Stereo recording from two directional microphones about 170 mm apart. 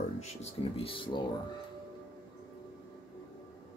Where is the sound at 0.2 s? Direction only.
35° left (ahead or behind).